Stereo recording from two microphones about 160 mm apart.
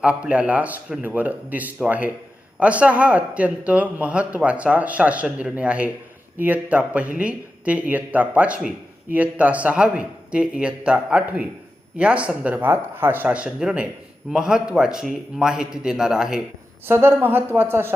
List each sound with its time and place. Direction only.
0.0 s a man's voice: 5° right (ahead or behind)
16.8 s speech: 15° right (ahead or behind)